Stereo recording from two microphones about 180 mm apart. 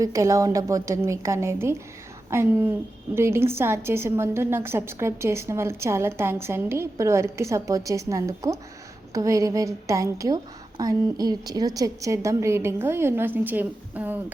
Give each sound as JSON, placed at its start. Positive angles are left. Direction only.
{"t": 0.0, "sound": "a woman's voice", "side_deg": -20}